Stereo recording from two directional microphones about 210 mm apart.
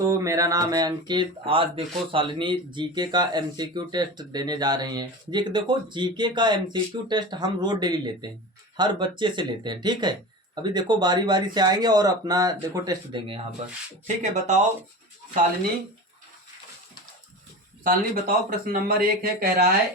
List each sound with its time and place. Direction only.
0.0 s speech: 15° right (ahead or behind)
14.2 s speech: 35° right (ahead or behind)
17.8 s speech: 40° right (ahead or behind)